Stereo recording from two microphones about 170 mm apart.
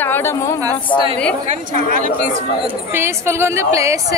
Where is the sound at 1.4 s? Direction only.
45° right (ahead or behind).